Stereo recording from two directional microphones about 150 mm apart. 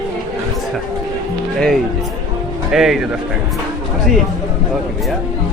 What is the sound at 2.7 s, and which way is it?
Speech, 5° right (ahead or behind).